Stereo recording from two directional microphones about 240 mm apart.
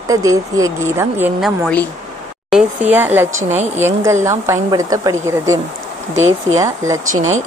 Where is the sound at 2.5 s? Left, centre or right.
Centre.